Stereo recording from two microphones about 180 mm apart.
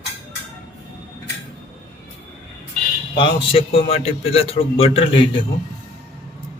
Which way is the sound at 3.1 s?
30° left (ahead or behind).